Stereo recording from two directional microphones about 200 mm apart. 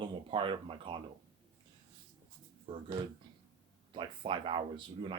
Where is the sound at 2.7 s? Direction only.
30° right (ahead or behind).